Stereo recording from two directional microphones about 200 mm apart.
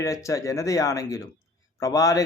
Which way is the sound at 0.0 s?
15° left (ahead or behind).